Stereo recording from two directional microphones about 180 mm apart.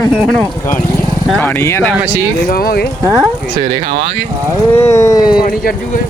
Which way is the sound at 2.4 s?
55° left (ahead or behind).